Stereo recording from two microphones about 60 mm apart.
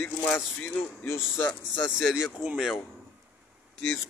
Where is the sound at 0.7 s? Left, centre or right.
Left.